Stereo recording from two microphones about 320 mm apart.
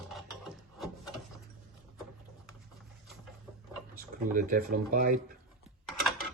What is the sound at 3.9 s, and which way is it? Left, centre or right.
Speech, right.